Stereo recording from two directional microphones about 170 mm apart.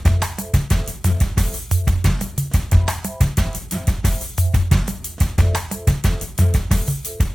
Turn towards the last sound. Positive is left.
turn(degrees=0)  # may be behind; listen again after turning